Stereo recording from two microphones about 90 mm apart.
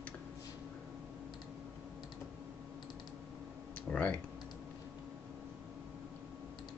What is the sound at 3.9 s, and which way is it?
Computer keyboard, 15° left (ahead or behind).